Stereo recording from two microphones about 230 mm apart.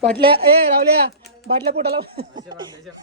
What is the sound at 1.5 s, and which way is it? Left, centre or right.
Speech, right.